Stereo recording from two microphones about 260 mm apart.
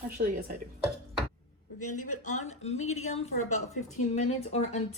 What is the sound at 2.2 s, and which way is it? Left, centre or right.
Speech, left.